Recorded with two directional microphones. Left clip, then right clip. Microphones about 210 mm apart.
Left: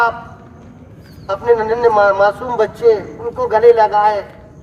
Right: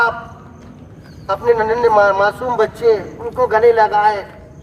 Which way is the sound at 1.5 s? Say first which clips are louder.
Left 1 dB; 15° right (ahead or behind).